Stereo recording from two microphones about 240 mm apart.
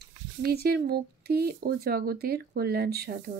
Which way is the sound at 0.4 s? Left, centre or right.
Right.